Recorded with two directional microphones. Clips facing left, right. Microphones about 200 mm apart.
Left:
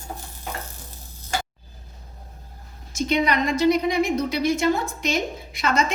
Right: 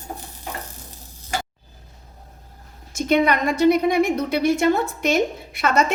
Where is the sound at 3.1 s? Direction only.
60° right (ahead or behind).